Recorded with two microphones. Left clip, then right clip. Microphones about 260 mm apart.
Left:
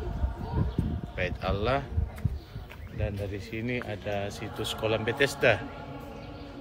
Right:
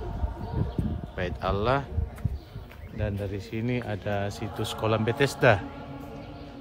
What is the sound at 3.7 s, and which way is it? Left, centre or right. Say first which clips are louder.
Speech: right 2 dB; right.